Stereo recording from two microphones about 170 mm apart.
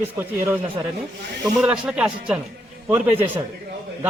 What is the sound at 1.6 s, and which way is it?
Speech, 5° right (ahead or behind).